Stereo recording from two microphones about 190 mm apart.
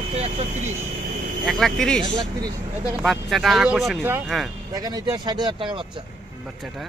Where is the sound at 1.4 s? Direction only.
Centre (ahead or behind).